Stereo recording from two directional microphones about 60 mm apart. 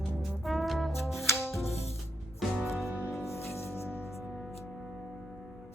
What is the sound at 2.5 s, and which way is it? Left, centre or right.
Music, centre.